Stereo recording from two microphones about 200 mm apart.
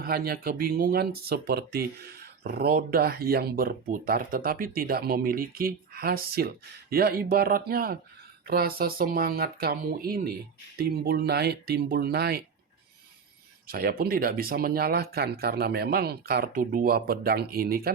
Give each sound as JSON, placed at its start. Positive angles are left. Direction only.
{"t": 0.0, "sound": "speech", "side_deg": -50}
{"t": 13.7, "sound": "speech", "side_deg": -50}